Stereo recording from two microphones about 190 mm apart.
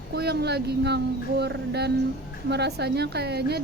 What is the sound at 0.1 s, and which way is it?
A woman's voice, 60° right (ahead or behind).